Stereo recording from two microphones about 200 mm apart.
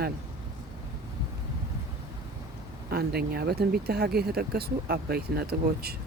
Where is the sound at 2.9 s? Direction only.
50° right (ahead or behind).